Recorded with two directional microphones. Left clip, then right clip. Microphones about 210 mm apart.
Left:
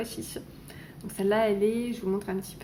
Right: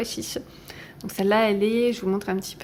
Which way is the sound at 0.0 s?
35° right (ahead or behind).